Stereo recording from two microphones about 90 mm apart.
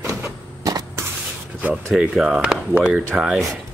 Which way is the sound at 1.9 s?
5° right (ahead or behind).